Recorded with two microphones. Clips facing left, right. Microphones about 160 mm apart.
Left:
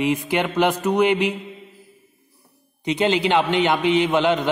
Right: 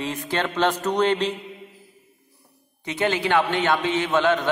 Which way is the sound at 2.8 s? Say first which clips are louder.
Left 4 dB; 20° left (ahead or behind).